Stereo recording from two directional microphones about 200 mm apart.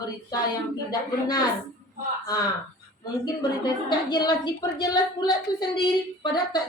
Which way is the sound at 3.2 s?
20° left (ahead or behind).